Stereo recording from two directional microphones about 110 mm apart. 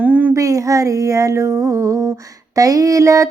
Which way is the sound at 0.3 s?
30° right (ahead or behind).